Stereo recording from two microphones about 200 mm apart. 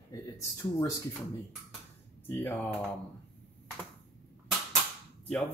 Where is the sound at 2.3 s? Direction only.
10° left (ahead or behind).